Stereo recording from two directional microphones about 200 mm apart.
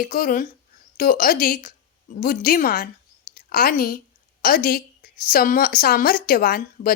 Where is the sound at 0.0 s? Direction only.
45° left (ahead or behind).